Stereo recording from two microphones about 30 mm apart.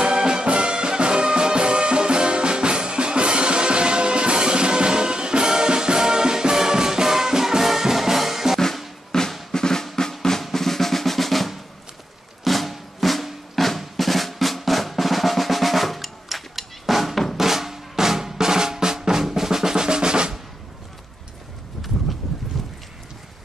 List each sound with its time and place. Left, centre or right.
0.0 s music: right; by 8.5 s centre
9.1 s drum: centre
10.4 s drum roll: centre
12.4 s drum: centre
17.4 s drum: centre; by 20.3 s right
22.2 s clip-clop: centre